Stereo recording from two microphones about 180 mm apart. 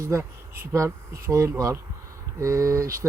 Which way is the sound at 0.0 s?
15° right (ahead or behind).